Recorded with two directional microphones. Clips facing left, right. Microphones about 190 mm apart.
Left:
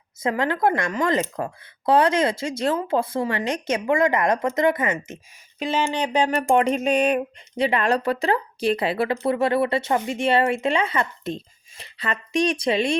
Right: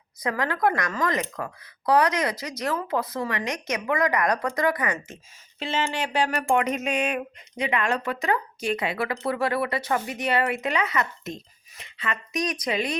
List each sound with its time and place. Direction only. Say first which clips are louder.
0.2 s speech: left 3 dB; 25° left (ahead or behind)
6.5 s speech: left 6 dB; 35° left (ahead or behind)